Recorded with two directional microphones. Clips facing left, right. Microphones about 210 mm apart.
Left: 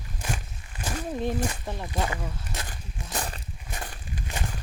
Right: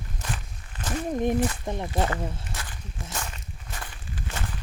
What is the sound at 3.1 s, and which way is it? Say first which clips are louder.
Walk: left 4 dB; 35° left (ahead or behind).